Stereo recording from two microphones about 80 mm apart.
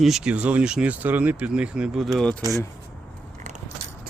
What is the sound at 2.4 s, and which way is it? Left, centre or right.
Speech, right.